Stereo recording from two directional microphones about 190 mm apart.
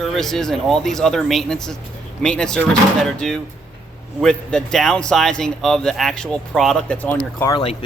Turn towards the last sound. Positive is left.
turn(degrees=30)  # may be behind; listen again after turning